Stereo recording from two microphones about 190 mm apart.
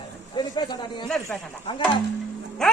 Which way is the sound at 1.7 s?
25° left (ahead or behind).